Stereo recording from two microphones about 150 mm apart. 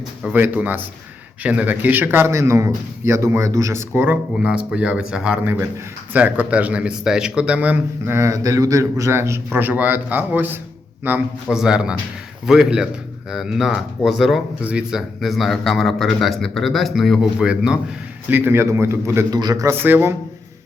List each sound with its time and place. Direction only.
0.2 s a man's voice: 10° right (ahead or behind)